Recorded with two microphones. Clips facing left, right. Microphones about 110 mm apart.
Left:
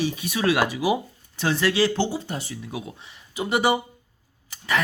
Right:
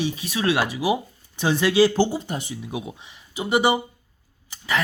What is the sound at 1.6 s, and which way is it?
Speech, 30° right (ahead or behind).